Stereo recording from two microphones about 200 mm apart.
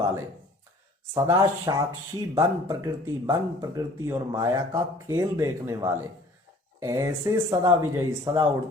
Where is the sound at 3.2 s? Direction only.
15° right (ahead or behind).